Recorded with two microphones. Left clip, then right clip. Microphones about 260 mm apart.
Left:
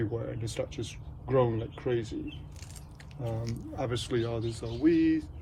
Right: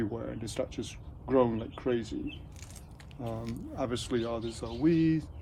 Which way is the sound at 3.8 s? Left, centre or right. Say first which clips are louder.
Left 1 dB; right.